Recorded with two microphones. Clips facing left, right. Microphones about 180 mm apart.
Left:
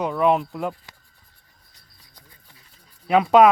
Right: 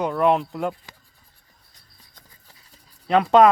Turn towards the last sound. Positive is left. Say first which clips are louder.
# even
turn(degrees=5)  # may be behind; listen again after turning